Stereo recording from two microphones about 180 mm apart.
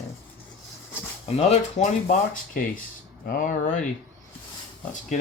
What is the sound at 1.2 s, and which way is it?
Speech, 35° left (ahead or behind).